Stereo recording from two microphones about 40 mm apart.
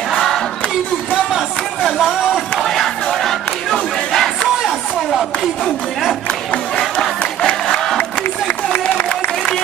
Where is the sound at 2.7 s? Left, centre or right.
Centre.